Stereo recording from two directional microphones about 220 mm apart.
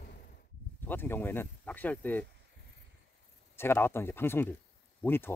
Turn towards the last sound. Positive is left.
turn(degrees=10)  # may be behind; listen again after turning